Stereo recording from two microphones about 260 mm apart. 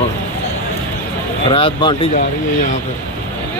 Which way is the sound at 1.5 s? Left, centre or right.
Centre.